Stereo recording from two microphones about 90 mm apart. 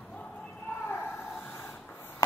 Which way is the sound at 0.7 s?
20° left (ahead or behind).